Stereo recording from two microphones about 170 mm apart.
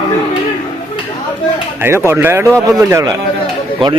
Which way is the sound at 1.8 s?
15° right (ahead or behind).